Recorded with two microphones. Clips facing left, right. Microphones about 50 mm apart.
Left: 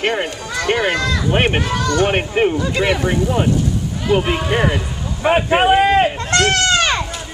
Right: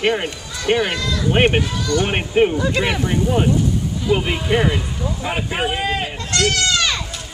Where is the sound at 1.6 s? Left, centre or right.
Left.